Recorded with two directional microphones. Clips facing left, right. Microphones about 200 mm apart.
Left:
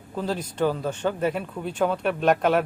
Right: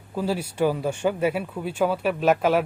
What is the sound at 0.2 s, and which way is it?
Speech, 10° right (ahead or behind).